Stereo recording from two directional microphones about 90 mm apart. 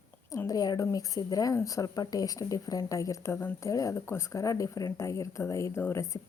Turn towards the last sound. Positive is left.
turn(degrees=35)  # may be behind; listen again after turning